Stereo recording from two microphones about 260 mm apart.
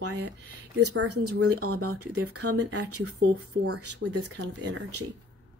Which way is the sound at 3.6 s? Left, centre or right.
Right.